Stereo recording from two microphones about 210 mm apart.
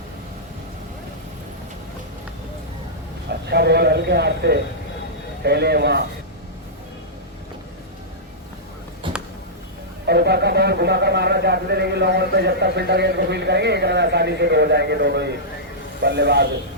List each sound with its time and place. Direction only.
3.4 s a man's voice: 50° right (ahead or behind)
9.0 s a sound: 25° right (ahead or behind)
10.1 s a man's voice: 50° right (ahead or behind)